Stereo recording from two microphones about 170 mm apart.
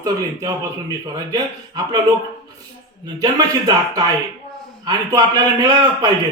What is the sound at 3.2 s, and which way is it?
A man's voice, 25° right (ahead or behind).